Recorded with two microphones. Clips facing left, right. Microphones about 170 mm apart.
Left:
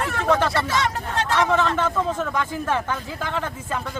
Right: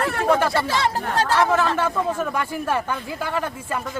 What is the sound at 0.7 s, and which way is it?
Speech, 30° right (ahead or behind).